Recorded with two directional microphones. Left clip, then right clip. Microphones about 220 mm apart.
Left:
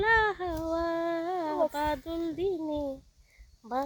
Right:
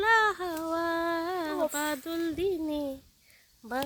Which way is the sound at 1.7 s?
10° right (ahead or behind).